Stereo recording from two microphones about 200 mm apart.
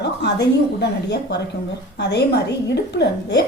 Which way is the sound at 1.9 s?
55° left (ahead or behind).